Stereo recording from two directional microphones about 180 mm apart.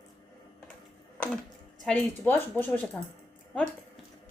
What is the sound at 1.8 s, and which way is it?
Speech, 10° left (ahead or behind).